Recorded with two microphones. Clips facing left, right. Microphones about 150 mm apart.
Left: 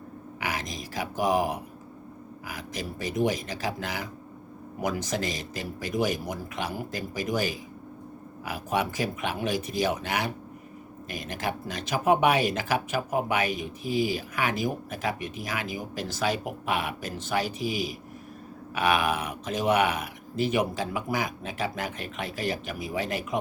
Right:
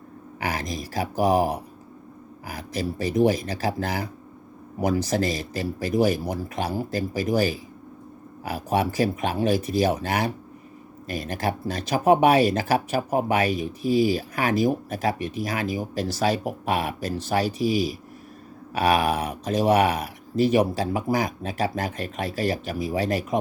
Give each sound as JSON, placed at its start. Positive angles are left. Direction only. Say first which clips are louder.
{"t": 0.3, "sound": "speech", "louder": "right 5 dB", "side_deg": -40}